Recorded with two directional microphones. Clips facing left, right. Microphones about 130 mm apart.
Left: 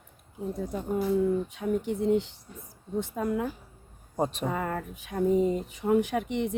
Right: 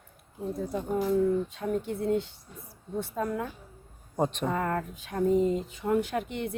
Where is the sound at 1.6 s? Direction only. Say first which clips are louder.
Left 2 dB; 15° left (ahead or behind).